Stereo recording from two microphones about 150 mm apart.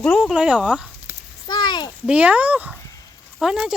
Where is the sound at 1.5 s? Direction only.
30° left (ahead or behind).